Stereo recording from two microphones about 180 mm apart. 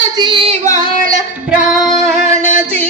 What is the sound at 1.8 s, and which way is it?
Female singing, centre (ahead or behind).